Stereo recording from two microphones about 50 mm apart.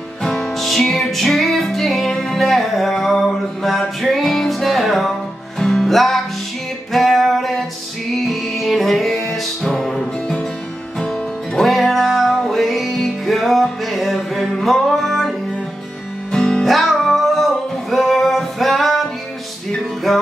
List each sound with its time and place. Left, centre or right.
0.2 s music: centre
11.5 s music: centre
16.3 s music: centre
16.6 s music: centre
20.1 s music: centre